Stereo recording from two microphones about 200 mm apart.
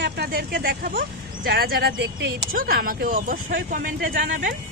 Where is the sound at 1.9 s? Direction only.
60° right (ahead or behind).